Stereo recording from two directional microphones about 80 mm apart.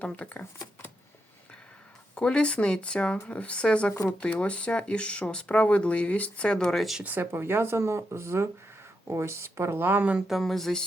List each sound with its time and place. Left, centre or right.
0.0 s speech: centre
2.1 s speech: centre
7.0 s speech: right
10.2 s speech: centre